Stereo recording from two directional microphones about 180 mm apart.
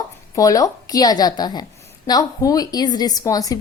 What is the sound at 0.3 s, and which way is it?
A woman's voice, 20° left (ahead or behind).